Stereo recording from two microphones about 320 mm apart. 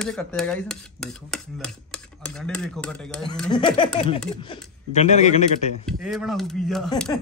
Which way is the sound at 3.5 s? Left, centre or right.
Centre.